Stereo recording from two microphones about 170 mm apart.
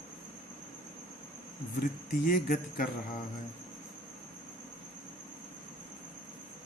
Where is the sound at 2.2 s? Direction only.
55° left (ahead or behind).